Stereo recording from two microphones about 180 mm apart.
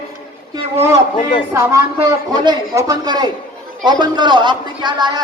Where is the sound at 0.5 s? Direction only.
15° right (ahead or behind).